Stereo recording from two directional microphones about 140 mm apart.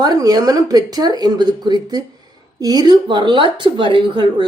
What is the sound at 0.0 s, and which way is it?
A woman's voice, 25° right (ahead or behind).